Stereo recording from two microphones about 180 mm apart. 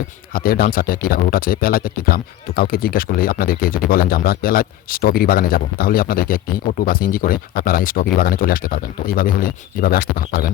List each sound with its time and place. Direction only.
0.3 s speech: 55° left (ahead or behind)